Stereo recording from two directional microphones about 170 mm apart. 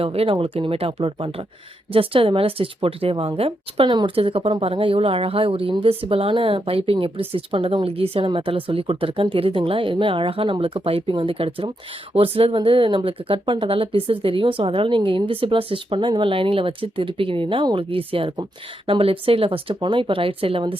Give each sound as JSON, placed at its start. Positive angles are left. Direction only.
{"t": 0.0, "sound": "speech", "side_deg": -35}